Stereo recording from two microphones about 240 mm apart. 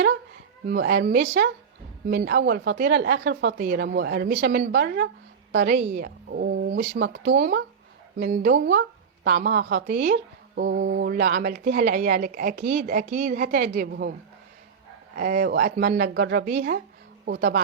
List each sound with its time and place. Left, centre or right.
0.7 s speech: right
15.1 s speech: right